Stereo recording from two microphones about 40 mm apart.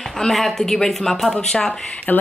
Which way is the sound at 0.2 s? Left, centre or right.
Centre.